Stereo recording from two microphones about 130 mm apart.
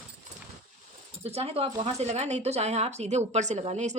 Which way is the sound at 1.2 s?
50° right (ahead or behind).